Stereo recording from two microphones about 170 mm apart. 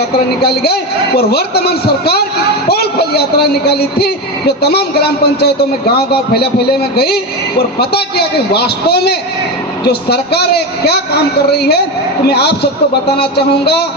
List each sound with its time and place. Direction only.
0.4 s a man's voice: 70° left (ahead or behind)